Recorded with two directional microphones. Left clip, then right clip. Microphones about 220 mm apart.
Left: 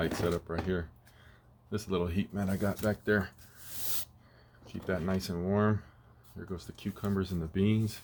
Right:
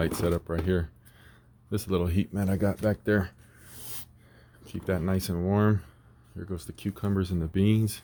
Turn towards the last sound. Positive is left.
turn(degrees=-40)  # may be behind; listen again after turning